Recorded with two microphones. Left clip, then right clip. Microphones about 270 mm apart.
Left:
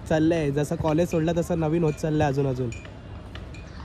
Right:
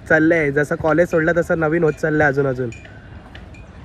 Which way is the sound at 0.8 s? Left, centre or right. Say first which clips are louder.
Right 8 dB; centre.